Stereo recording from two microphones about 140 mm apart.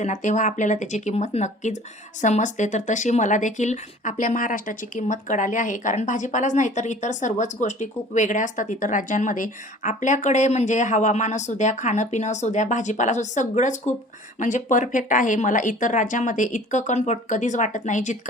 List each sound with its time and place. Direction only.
0.0 s speech: 60° left (ahead or behind)